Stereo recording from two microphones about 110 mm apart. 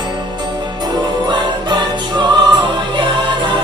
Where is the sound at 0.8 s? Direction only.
40° right (ahead or behind).